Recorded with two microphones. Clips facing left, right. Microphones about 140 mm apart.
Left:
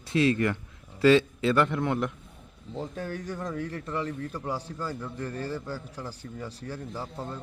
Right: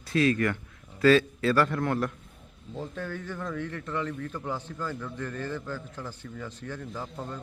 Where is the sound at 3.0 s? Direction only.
40° left (ahead or behind).